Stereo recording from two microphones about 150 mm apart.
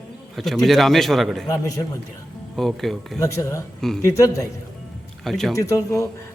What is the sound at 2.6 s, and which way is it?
Speech, centre (ahead or behind).